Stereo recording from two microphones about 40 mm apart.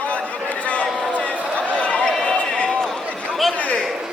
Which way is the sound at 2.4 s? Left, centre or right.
Left.